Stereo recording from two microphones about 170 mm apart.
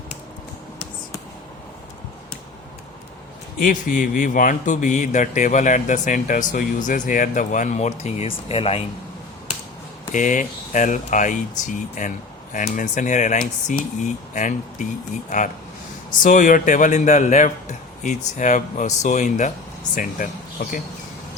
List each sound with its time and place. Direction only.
3.6 s speech: 50° left (ahead or behind); by 8.8 s 35° left (ahead or behind)
10.2 s speech: 50° left (ahead or behind)
16.2 s speech: 50° left (ahead or behind)